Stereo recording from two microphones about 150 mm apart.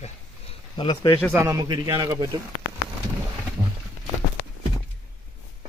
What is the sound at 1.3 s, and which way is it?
Speech, 20° right (ahead or behind).